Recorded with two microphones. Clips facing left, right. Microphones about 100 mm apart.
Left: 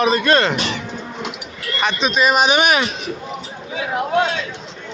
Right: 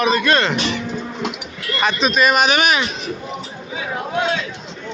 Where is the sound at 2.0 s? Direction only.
20° left (ahead or behind).